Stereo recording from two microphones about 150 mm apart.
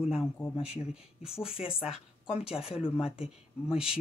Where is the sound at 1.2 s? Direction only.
5° right (ahead or behind).